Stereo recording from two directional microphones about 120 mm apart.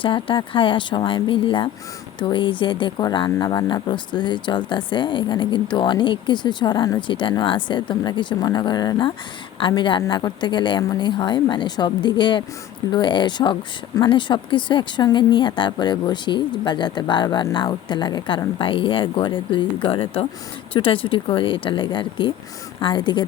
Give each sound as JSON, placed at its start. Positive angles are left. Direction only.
{"t": 0.0, "sound": "speech", "side_deg": 45}